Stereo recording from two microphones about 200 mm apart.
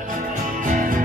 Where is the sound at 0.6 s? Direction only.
40° right (ahead or behind).